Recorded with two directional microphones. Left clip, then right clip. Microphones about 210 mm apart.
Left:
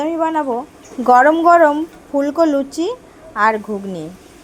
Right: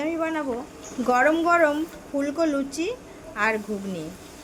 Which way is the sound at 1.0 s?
20° left (ahead or behind).